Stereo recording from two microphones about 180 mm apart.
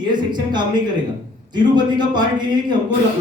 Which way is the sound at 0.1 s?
25° right (ahead or behind).